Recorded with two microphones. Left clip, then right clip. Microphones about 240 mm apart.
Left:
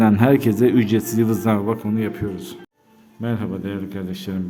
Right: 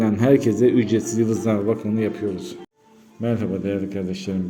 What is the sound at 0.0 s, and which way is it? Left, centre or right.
A man's voice, centre.